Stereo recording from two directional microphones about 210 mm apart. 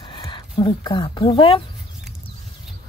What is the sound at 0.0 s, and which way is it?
Speech, 25° left (ahead or behind).